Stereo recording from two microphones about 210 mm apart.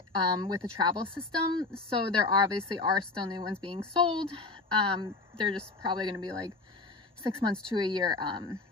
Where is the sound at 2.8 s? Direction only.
20° right (ahead or behind).